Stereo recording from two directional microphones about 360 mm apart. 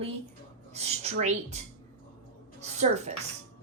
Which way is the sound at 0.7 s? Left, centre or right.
Centre.